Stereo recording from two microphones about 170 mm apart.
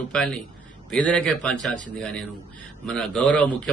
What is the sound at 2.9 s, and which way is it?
Speech, 5° left (ahead or behind).